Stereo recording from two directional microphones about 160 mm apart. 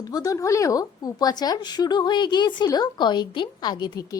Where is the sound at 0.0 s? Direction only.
25° left (ahead or behind).